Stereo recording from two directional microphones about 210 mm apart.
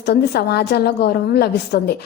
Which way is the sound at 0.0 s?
50° left (ahead or behind).